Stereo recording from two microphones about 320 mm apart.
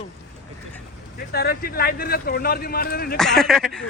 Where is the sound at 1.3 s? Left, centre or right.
Left.